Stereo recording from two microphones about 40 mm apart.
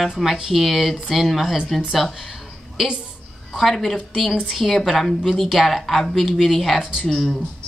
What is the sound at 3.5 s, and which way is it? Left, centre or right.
A woman's voice, centre.